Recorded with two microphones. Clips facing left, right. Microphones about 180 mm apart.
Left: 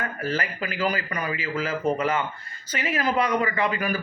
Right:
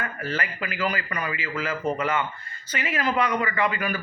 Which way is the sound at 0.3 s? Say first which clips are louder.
Left 2 dB; 40° left (ahead or behind).